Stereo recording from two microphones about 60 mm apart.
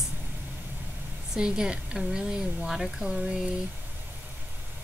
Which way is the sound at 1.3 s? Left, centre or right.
Centre.